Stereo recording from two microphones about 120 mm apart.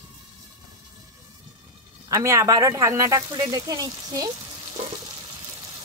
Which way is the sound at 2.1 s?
25° right (ahead or behind).